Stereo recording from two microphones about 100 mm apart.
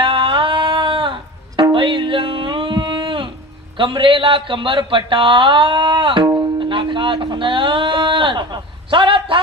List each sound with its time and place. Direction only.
0.0 s music: 60° right (ahead or behind)
3.8 s a man's voice: 55° right (ahead or behind)
6.6 s a sound: 55° right (ahead or behind)